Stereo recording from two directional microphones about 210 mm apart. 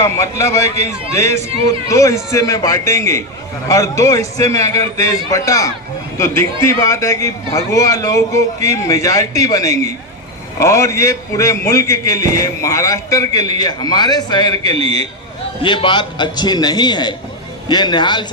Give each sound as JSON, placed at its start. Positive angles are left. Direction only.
{"t": 0.0, "sound": "a man's voice", "side_deg": 15}
{"t": 14.7, "sound": "a man's voice", "side_deg": -30}
{"t": 15.6, "sound": "a man's voice", "side_deg": 25}